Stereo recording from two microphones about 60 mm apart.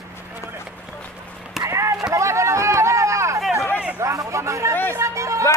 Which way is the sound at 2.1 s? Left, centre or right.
Right.